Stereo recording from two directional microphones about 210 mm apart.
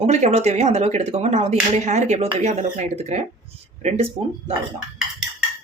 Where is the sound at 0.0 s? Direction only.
30° right (ahead or behind).